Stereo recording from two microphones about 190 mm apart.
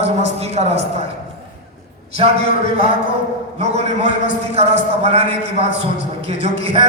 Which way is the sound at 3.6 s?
35° right (ahead or behind).